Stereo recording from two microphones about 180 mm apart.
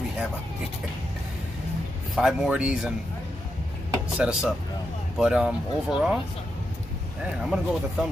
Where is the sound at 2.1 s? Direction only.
5° right (ahead or behind).